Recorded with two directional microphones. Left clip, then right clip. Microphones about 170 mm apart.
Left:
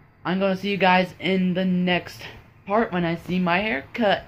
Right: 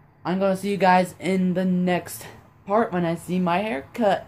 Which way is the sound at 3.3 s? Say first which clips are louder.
Left 2 dB; 20° right (ahead or behind).